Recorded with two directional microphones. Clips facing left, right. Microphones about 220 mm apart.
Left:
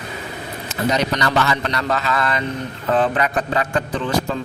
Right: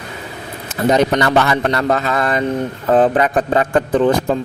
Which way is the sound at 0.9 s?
50° right (ahead or behind).